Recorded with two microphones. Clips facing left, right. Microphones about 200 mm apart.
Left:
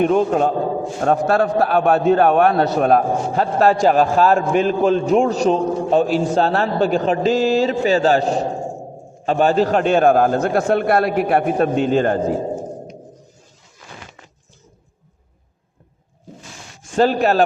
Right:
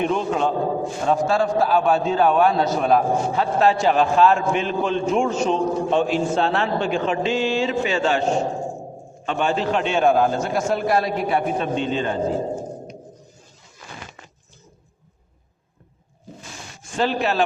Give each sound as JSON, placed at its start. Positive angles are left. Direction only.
{"t": 0.0, "sound": "a man's voice", "side_deg": 45}
{"t": 1.0, "sound": "a man's voice", "side_deg": 60}
{"t": 11.7, "sound": "a man's voice", "side_deg": 5}
{"t": 11.9, "sound": "a man's voice", "side_deg": 50}
{"t": 17.0, "sound": "a man's voice", "side_deg": 40}